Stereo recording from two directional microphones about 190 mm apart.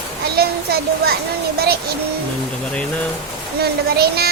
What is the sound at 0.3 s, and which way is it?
A child's voice, 55° right (ahead or behind).